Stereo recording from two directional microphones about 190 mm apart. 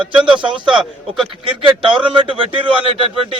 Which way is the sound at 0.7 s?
5° right (ahead or behind).